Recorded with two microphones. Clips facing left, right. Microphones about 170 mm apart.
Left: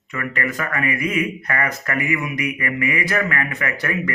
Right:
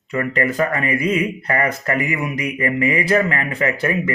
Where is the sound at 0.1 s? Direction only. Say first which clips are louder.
Right 6 dB; 30° right (ahead or behind).